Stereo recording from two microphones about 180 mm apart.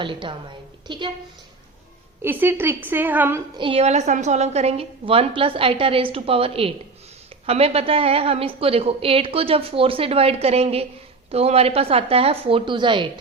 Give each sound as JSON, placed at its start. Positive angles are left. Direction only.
{"t": 0.0, "sound": "a woman's voice", "side_deg": -25}
{"t": 2.2, "sound": "a woman's voice", "side_deg": -10}
{"t": 3.6, "sound": "a woman's voice", "side_deg": -30}